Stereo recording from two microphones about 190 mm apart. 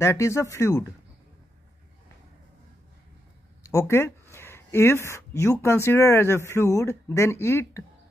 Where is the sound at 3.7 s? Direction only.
15° left (ahead or behind).